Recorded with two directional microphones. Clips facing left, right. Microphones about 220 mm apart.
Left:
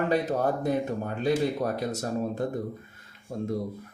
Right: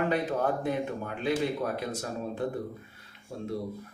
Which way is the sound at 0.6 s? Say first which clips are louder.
Left 3 dB; 40° left (ahead or behind).